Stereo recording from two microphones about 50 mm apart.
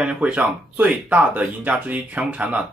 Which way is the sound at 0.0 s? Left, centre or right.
Right.